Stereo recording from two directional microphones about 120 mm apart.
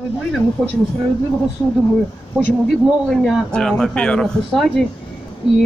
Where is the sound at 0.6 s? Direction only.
5° right (ahead or behind).